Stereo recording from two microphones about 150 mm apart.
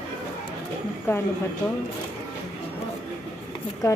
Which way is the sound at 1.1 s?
15° left (ahead or behind).